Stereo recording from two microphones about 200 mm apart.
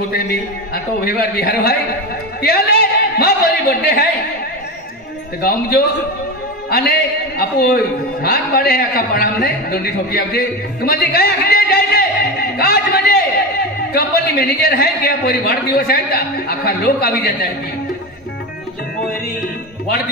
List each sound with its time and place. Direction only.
0.1 s a man's voice: 50° left (ahead or behind)
5.4 s a man's voice: 50° left (ahead or behind)